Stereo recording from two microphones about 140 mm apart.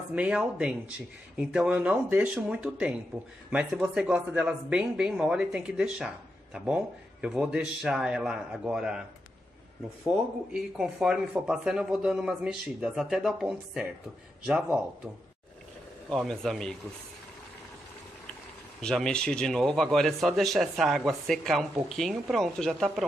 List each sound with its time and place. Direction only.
0.1 s speech: 10° right (ahead or behind)
10.0 s speech: 5° right (ahead or behind)
16.1 s speech: 5° left (ahead or behind)
18.8 s speech: 5° left (ahead or behind)